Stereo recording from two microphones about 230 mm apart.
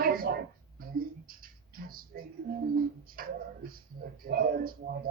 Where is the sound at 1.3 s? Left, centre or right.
Right.